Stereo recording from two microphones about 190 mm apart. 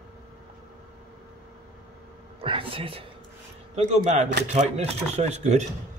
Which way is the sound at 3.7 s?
35° right (ahead or behind).